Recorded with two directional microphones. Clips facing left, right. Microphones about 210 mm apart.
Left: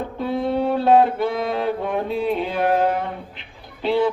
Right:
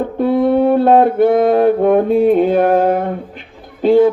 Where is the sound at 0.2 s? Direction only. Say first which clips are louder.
Right 9 dB; 55° right (ahead or behind).